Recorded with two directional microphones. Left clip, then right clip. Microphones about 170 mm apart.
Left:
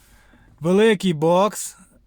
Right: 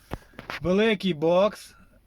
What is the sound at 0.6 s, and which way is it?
Speech, 90° left.